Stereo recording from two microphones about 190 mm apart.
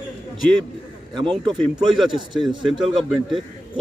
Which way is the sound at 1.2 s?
Centre (ahead or behind).